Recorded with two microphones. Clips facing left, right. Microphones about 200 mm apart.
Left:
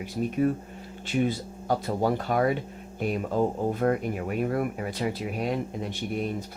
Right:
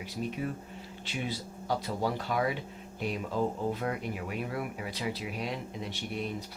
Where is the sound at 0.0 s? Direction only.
50° left (ahead or behind).